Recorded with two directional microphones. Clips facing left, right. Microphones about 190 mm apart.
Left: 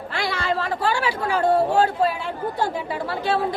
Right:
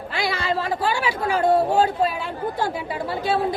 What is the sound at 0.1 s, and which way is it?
A woman's voice, 10° right (ahead or behind).